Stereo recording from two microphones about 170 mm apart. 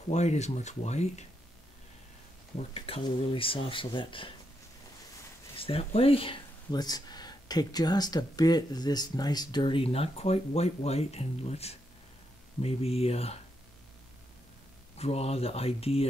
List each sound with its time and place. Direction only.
0.1 s speech: 40° left (ahead or behind)
2.7 s speech: 35° left (ahead or behind)
5.6 s speech: 35° left (ahead or behind)
15.0 s speech: 35° left (ahead or behind)